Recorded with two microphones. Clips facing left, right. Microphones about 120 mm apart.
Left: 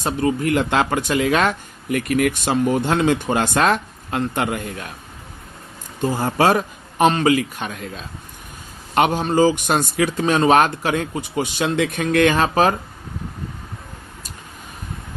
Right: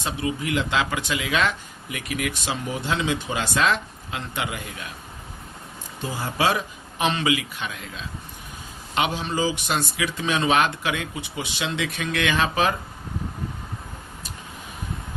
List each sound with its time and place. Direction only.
0.0 s speech: 50° left (ahead or behind)
6.0 s speech: 50° left (ahead or behind)